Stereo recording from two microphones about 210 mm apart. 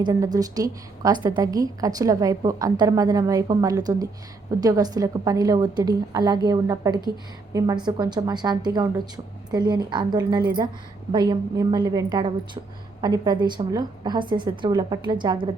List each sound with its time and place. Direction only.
0.0 s a woman's voice: 15° right (ahead or behind)